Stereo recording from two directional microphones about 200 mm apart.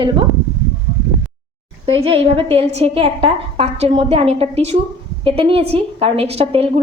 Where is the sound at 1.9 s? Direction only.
30° right (ahead or behind).